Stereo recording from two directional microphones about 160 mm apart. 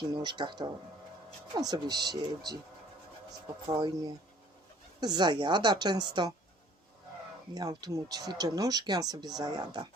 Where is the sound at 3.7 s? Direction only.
25° right (ahead or behind).